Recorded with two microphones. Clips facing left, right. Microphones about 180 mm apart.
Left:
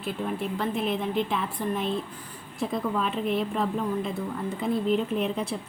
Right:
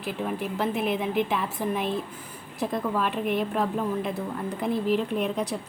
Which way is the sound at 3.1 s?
50° right (ahead or behind).